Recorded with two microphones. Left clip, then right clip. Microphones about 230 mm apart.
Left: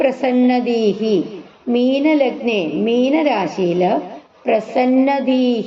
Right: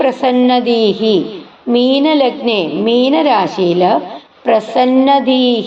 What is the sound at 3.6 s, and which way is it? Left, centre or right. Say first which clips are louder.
Speech: right 5 dB; right.